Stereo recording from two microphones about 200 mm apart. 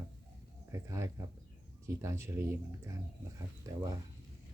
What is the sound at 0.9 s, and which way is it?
Speech, 15° right (ahead or behind).